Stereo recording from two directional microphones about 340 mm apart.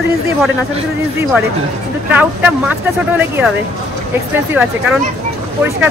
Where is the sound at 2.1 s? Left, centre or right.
Centre.